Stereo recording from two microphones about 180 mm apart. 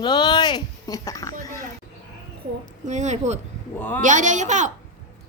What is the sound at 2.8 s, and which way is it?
A child's voice, 40° right (ahead or behind).